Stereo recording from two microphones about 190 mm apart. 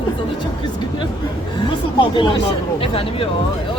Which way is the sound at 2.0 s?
25° left (ahead or behind).